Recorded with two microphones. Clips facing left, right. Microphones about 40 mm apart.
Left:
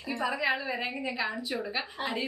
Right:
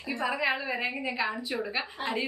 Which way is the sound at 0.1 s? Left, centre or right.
Centre.